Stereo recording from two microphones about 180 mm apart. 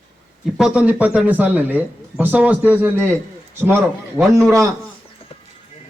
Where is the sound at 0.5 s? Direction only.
5° right (ahead or behind).